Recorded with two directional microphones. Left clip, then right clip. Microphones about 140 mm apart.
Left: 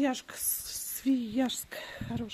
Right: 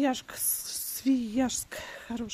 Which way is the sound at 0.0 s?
35° right (ahead or behind).